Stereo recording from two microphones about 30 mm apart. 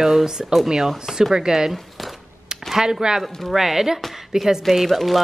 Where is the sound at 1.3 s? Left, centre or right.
Centre.